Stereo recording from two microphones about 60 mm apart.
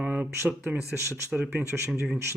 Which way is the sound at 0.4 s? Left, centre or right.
Right.